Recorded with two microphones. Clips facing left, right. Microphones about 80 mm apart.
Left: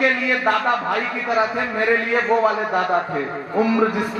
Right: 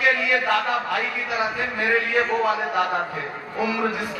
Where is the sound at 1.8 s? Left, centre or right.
Left.